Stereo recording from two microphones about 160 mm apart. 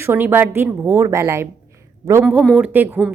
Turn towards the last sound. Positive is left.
turn(degrees=-10)  # may be behind; listen again after turning